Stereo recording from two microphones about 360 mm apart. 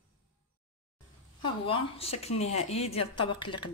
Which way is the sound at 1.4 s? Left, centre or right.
Centre.